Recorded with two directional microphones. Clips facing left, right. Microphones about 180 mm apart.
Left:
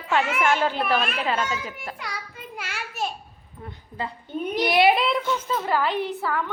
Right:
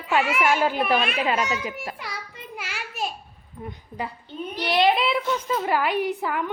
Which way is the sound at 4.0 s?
15° right (ahead or behind).